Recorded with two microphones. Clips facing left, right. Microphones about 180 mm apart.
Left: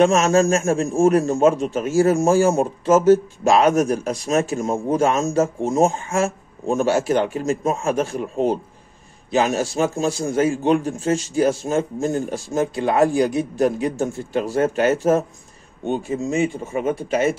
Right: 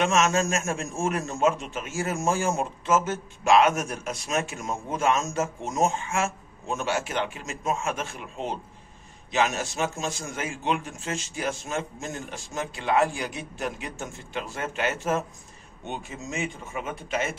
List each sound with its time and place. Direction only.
0.0 s a man's voice: 35° left (ahead or behind)
6.0 s a man's voice: 45° left (ahead or behind)